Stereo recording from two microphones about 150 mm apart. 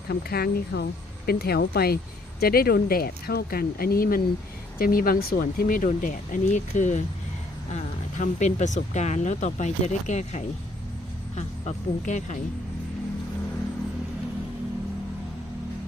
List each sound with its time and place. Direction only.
0.1 s speech: 90° left; by 12.4 s 55° left (ahead or behind)